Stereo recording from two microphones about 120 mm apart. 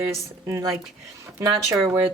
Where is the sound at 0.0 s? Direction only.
25° right (ahead or behind).